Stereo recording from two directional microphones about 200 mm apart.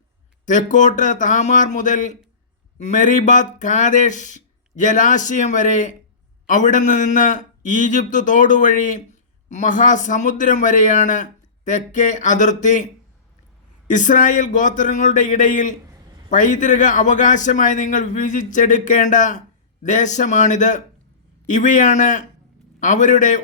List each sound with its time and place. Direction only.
0.4 s speech: 40° left (ahead or behind)